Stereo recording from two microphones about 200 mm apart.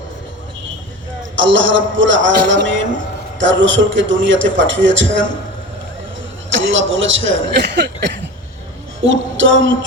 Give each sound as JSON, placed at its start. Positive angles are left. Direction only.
{"t": 1.4, "sound": "a man's voice", "side_deg": -70}
{"t": 6.7, "sound": "a man's voice", "side_deg": -70}
{"t": 9.0, "sound": "a man's voice", "side_deg": -70}